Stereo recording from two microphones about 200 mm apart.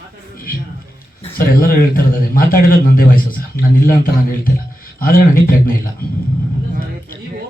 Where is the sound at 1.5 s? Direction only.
45° left (ahead or behind).